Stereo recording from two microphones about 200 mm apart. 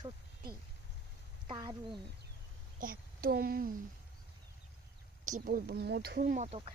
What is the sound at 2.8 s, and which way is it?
Speech, 45° right (ahead or behind).